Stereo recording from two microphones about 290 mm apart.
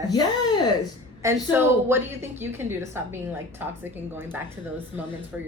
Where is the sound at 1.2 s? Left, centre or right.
Centre.